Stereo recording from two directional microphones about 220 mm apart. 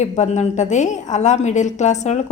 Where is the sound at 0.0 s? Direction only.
30° left (ahead or behind).